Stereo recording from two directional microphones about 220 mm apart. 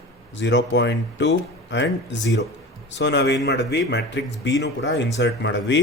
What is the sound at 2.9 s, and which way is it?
Speech, 55° left (ahead or behind).